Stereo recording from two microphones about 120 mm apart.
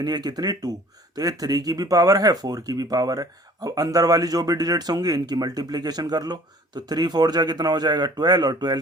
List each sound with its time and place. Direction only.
0.0 s speech: 35° right (ahead or behind)